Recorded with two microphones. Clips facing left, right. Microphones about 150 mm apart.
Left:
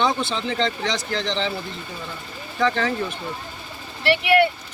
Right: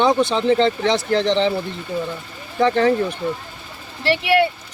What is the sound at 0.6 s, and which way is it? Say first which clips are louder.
Speech: right 6 dB; 55° right (ahead or behind).